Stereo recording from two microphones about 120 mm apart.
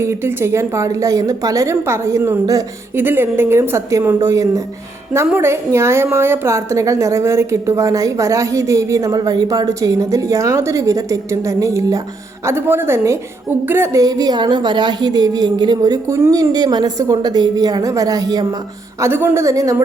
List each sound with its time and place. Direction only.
0.0 s a woman's voice: 20° right (ahead or behind)
18.9 s a woman's voice: 20° right (ahead or behind)